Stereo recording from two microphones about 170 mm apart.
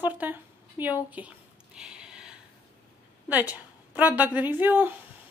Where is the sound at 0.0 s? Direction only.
10° right (ahead or behind).